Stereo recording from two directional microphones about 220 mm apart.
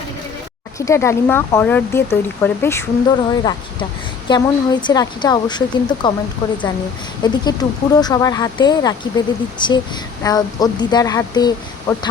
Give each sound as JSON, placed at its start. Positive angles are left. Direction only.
{"t": 0.8, "sound": "a woman's voice", "side_deg": 15}
{"t": 7.2, "sound": "speech", "side_deg": 20}